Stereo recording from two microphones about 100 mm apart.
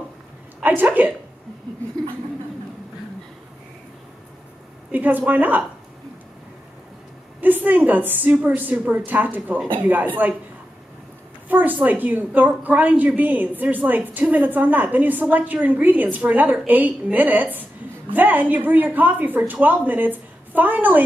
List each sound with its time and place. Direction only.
0.7 s speech: 20° right (ahead or behind)
4.9 s a woman's voice: 15° right (ahead or behind)
7.3 s a woman's voice: 15° right (ahead or behind)
11.4 s a sound: 15° right (ahead or behind)
11.8 s a woman's voice: 15° right (ahead or behind)